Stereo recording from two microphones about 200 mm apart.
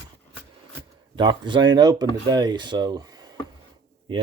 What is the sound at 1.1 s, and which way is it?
Speech, 25° right (ahead or behind).